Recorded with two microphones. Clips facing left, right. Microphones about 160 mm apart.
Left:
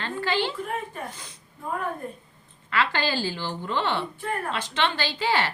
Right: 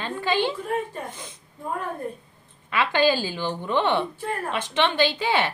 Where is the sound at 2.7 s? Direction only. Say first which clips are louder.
Right 5 dB; 15° right (ahead or behind).